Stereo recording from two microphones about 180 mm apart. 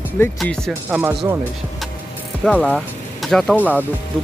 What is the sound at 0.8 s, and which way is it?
Speech, 10° right (ahead or behind).